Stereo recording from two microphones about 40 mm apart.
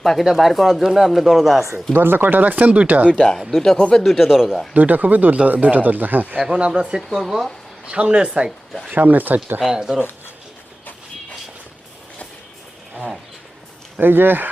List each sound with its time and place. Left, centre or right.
0.0 s speech: centre
2.0 s speech: right
3.1 s speech: left
3.5 s speech: centre
4.0 s speech: centre
4.7 s speech: right
6.7 s speech: centre
7.9 s speech: right
8.9 s speech: right
9.7 s speech: centre
14.0 s speech: right